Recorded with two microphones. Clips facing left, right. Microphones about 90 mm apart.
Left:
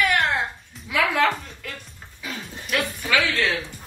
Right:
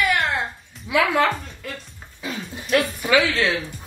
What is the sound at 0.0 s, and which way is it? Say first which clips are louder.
Music: even; centre (ahead or behind).